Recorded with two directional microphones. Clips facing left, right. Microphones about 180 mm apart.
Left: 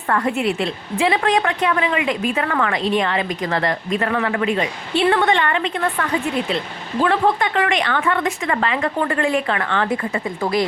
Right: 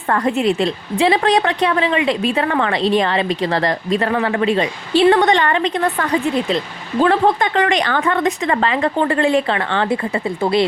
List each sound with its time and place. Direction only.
0.3 s a woman's voice: 30° right (ahead or behind)